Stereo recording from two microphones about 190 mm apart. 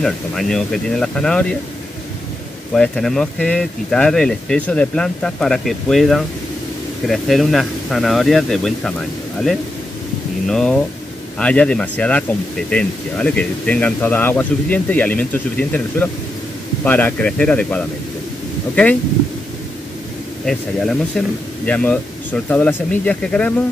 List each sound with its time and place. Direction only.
0.0 s speech: centre (ahead or behind)
2.7 s speech: 5° left (ahead or behind)
20.4 s speech: 5° left (ahead or behind)